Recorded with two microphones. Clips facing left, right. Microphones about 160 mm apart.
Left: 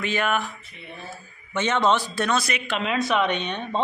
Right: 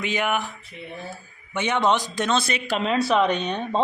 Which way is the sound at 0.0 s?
15° right (ahead or behind).